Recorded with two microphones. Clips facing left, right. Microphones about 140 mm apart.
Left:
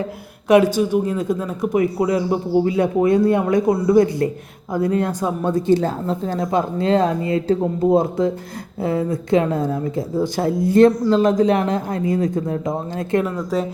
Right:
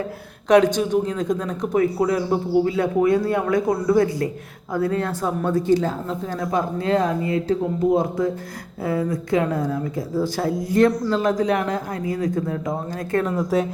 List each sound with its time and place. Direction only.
0.4 s speech: 10° left (ahead or behind)
13.3 s speech: centre (ahead or behind)